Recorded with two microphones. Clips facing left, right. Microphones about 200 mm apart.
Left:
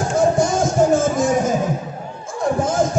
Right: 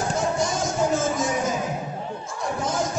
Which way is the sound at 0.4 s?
50° left (ahead or behind).